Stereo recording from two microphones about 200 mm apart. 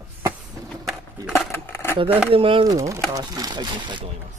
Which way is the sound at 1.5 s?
10° left (ahead or behind).